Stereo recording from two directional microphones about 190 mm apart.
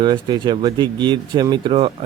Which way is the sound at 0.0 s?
25° right (ahead or behind).